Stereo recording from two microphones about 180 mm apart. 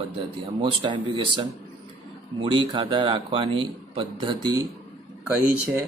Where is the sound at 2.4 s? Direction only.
25° right (ahead or behind).